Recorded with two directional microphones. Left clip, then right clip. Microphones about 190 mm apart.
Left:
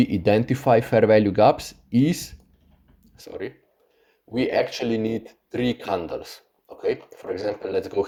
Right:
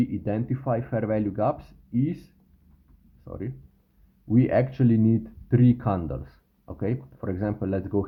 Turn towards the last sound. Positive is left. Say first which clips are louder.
# left 4 dB
turn(degrees=25)  # may be behind; listen again after turning